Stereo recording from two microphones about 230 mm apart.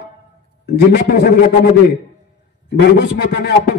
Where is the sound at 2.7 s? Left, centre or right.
Left.